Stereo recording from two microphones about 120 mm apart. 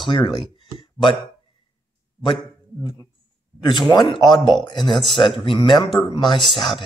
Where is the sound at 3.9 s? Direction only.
35° left (ahead or behind).